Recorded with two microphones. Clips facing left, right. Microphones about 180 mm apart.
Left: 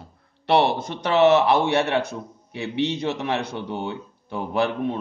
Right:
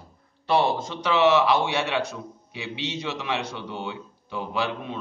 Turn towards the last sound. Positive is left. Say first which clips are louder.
# left 6 dB
turn(degrees=55)  # may be behind; listen again after turning